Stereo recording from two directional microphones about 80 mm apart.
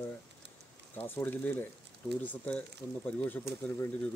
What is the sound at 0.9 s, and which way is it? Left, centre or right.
Speech, left.